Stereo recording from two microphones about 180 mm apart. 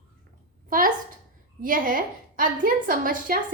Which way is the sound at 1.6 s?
50° right (ahead or behind).